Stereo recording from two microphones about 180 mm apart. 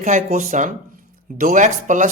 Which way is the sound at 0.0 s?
45° right (ahead or behind).